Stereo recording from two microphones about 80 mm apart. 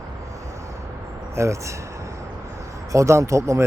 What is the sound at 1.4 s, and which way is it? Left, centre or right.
Speech, right.